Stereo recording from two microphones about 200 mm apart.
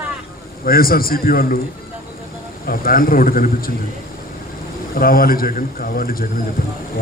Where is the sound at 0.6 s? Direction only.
45° left (ahead or behind).